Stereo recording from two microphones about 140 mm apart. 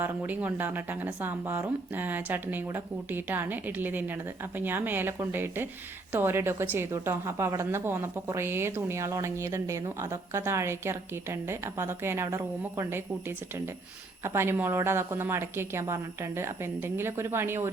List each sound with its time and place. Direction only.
0.0 s a woman's voice: 15° right (ahead or behind)